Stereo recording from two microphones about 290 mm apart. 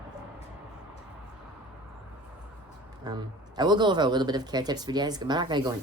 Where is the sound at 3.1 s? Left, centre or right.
Centre.